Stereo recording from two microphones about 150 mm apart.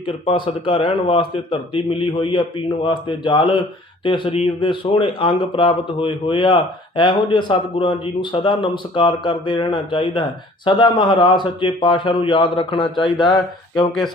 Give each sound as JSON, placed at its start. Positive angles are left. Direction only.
{"t": 0.3, "sound": "a man's voice", "side_deg": 35}